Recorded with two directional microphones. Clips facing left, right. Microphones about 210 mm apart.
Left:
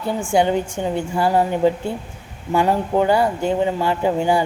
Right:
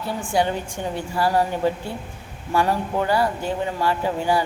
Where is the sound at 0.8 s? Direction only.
20° left (ahead or behind).